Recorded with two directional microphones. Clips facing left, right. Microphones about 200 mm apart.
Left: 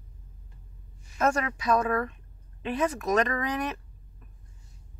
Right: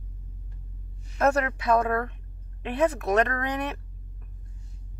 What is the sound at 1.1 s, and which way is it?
Speech, 60° right (ahead or behind).